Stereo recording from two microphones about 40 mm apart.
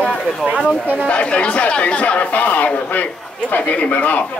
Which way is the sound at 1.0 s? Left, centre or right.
Left.